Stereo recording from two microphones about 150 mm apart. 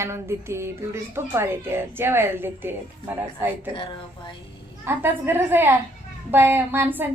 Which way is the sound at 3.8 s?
35° left (ahead or behind).